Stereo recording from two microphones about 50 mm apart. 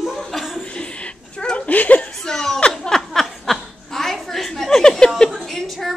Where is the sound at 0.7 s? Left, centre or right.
Left.